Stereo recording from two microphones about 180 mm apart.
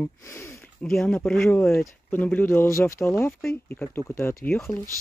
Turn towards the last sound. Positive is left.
turn(degrees=10)  # may be behind; listen again after turning